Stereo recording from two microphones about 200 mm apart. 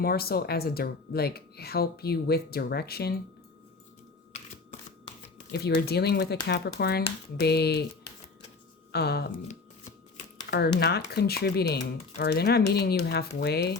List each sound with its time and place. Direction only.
0.0 s speech: 50° left (ahead or behind)
5.5 s speech: 55° left (ahead or behind)
8.9 s speech: 55° left (ahead or behind)
10.8 s speech: 55° left (ahead or behind)